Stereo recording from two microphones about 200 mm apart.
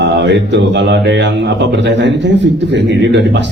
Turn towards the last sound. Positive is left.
turn(degrees=-60)  # may be behind; listen again after turning